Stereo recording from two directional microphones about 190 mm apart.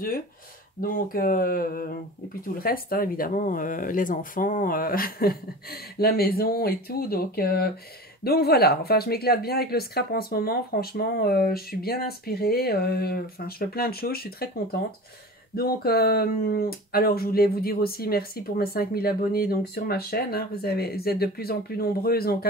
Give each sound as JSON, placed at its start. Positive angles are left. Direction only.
{"t": 0.7, "sound": "speech", "side_deg": 50}
{"t": 15.5, "sound": "speech", "side_deg": 50}